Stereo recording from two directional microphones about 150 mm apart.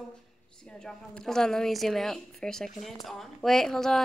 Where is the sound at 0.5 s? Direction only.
5° left (ahead or behind).